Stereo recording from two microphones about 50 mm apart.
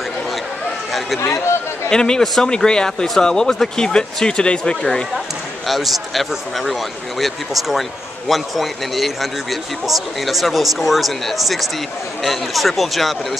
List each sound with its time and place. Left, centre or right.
1.2 s speech: left
1.9 s speech: centre
5.7 s a man's voice: centre